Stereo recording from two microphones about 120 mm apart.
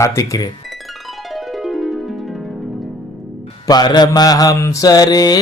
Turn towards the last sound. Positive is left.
turn(degrees=35)  # may be behind; listen again after turning